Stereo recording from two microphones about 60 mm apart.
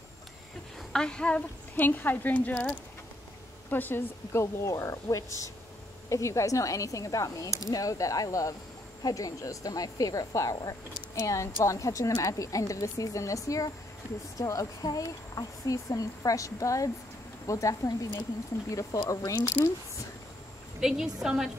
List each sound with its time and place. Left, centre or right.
0.9 s a woman's voice: centre
1.8 s a woman's voice: left
3.7 s speech: left
20.8 s a woman's voice: centre